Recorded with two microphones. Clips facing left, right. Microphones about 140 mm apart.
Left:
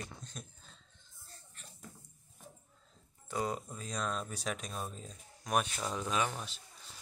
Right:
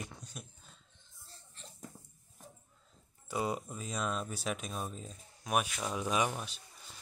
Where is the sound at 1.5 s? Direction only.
30° right (ahead or behind).